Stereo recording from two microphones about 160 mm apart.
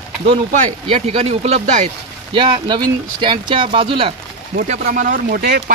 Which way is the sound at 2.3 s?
30° right (ahead or behind).